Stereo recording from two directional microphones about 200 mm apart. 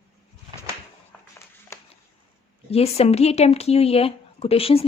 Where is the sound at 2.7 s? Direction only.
30° left (ahead or behind).